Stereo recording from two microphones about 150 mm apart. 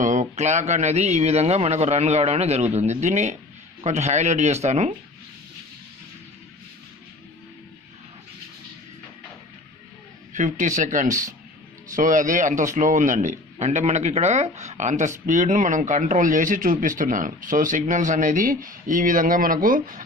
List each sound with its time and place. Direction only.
0.0 s a man's voice: 55° right (ahead or behind)
10.3 s speech: 55° right (ahead or behind)